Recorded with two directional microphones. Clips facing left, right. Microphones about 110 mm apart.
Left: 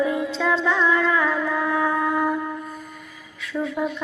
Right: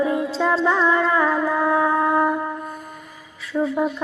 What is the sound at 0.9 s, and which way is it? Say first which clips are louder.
Humming: right 2 dB; 30° right (ahead or behind).